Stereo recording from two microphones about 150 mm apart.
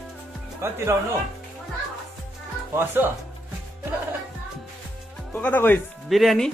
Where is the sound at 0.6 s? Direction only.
20° right (ahead or behind).